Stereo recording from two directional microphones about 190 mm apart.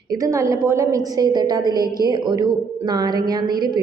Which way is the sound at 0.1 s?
15° right (ahead or behind).